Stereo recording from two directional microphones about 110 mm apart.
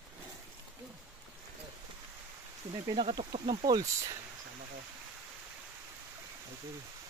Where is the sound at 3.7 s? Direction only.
35° right (ahead or behind).